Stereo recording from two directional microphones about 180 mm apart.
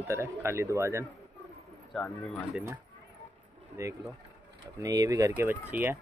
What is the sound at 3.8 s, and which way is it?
Speech, 15° right (ahead or behind).